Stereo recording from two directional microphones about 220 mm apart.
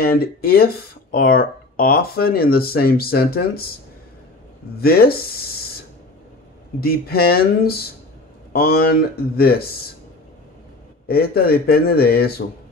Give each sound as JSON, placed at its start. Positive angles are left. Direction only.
{"t": 0.0, "sound": "speech", "side_deg": 45}
{"t": 4.7, "sound": "speech", "side_deg": 45}
{"t": 6.8, "sound": "speech", "side_deg": 45}
{"t": 11.1, "sound": "speech", "side_deg": 45}